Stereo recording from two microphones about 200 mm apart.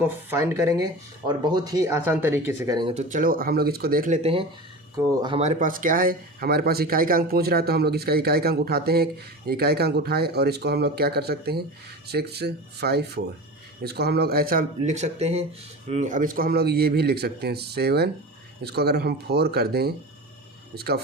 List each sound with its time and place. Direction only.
0.0 s speech: 10° right (ahead or behind)
2.6 s speech: 20° right (ahead or behind)
2.9 s speech: 35° right (ahead or behind)
4.2 s speech: 30° right (ahead or behind)
4.9 s speech: 20° right (ahead or behind)
5.4 s speech: 40° right (ahead or behind)
14.8 s speech: 35° right (ahead or behind); by 21.0 s 50° right (ahead or behind)